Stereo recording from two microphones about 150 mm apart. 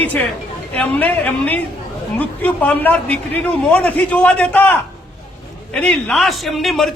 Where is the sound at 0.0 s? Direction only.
10° left (ahead or behind).